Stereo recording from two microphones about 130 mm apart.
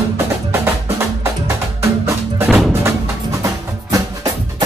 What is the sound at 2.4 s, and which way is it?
Music, centre (ahead or behind).